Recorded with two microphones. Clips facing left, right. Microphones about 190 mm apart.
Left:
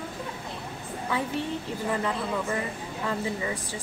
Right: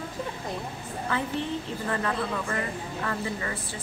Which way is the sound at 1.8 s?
15° left (ahead or behind).